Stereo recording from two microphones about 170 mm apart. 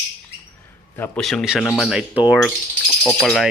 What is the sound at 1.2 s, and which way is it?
Speech, centre (ahead or behind).